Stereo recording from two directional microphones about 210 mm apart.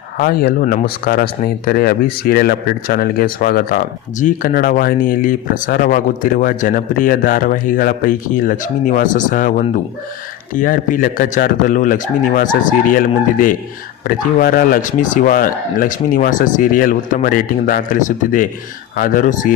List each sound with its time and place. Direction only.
0.2 s speech: 45° left (ahead or behind)